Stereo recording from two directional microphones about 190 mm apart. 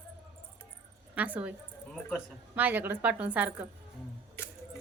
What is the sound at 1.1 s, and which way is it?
A woman's voice, 10° right (ahead or behind).